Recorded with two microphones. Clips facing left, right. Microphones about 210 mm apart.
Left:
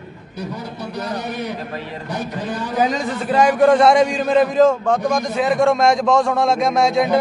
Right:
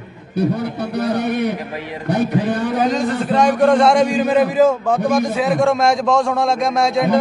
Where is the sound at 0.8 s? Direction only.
60° right (ahead or behind).